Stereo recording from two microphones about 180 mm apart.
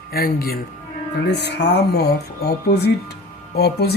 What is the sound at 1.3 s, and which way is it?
Speech, 70° left (ahead or behind).